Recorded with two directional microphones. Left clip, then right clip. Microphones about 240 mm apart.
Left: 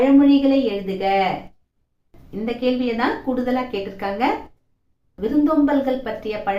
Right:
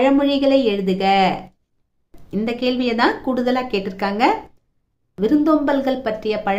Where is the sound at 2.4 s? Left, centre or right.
Right.